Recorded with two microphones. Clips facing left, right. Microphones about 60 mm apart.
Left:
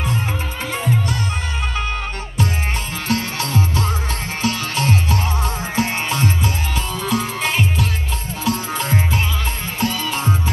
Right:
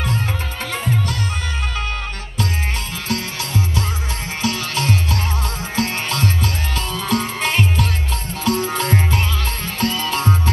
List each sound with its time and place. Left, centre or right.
3.1 s music: left
7.1 s music: centre